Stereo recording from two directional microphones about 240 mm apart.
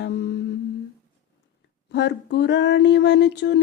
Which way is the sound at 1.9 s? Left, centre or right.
Left.